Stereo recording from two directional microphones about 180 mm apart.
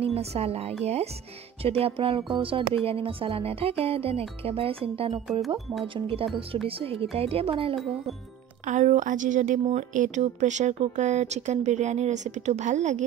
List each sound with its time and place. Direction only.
0.0 s a woman's voice: 35° right (ahead or behind)
8.6 s a woman's voice: 45° right (ahead or behind)